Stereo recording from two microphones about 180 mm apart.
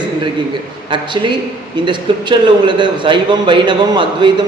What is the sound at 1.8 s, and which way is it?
A man's voice, 25° right (ahead or behind).